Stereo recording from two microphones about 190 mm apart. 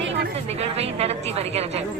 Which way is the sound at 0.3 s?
35° right (ahead or behind).